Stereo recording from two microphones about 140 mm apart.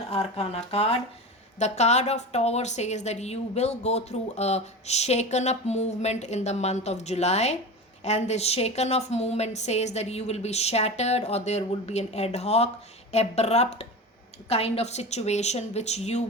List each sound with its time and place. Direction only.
0.1 s a woman's voice: 45° left (ahead or behind)